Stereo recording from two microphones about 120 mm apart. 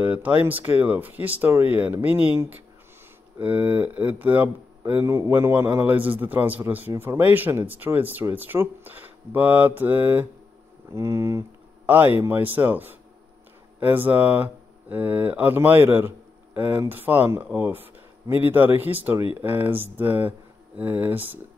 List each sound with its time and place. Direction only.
0.0 s speech: 15° right (ahead or behind)